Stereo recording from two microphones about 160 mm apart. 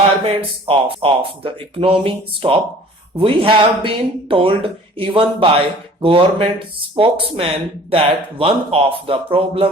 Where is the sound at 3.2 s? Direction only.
35° right (ahead or behind).